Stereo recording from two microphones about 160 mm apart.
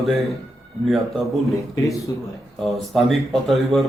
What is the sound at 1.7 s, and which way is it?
Speech, 20° left (ahead or behind).